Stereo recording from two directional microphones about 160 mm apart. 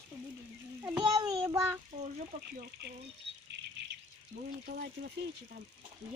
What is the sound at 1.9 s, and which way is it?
Speech, 45° right (ahead or behind).